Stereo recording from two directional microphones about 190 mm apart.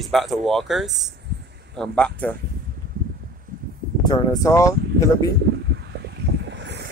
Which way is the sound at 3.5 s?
45° right (ahead or behind).